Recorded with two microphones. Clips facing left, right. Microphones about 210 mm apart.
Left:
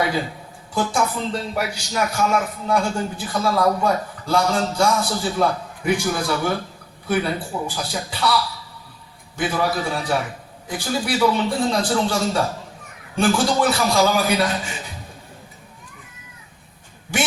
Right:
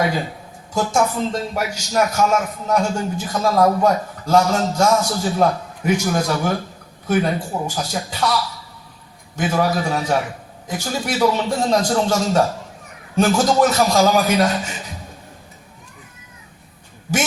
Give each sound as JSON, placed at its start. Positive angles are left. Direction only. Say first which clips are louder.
{"t": 0.7, "sound": "a woman's voice", "louder": "right 3 dB", "side_deg": -45}
{"t": 9.4, "sound": "a man's voice", "louder": "right 3 dB", "side_deg": -40}